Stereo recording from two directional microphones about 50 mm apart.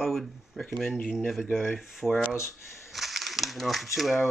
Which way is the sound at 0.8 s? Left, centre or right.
Centre.